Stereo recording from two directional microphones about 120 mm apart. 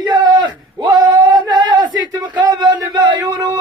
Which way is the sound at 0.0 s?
40° right (ahead or behind).